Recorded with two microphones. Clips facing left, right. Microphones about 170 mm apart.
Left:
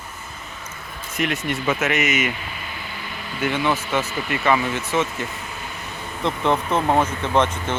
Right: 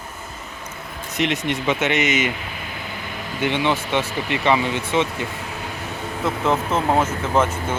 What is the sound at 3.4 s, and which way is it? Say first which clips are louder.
Speech: right 1 dB; 20° right (ahead or behind).